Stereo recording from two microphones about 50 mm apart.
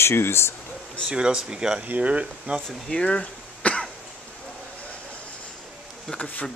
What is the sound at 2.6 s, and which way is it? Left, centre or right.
Speech, centre.